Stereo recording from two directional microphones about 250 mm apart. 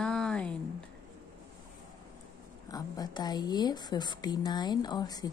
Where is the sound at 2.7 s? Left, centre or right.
Centre.